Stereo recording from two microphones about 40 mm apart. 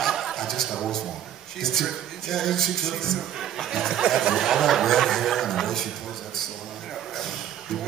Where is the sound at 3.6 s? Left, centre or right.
Centre.